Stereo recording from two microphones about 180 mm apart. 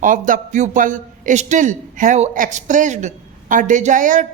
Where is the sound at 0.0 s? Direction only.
50° right (ahead or behind).